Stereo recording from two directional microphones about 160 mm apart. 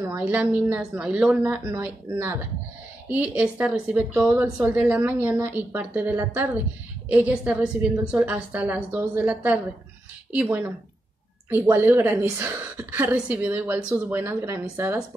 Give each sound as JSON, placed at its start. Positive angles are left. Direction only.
{"t": 0.2, "sound": "a woman's voice", "side_deg": -10}